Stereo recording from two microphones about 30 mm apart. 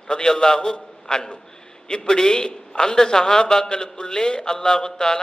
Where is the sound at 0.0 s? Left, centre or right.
Centre.